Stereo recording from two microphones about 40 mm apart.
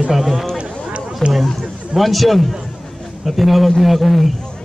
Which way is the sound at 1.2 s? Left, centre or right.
Centre.